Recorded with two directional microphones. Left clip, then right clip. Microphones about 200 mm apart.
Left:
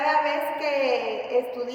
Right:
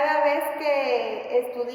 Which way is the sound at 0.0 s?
10° right (ahead or behind).